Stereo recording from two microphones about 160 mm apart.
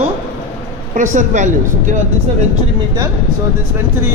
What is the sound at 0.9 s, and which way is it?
Speech, 50° right (ahead or behind).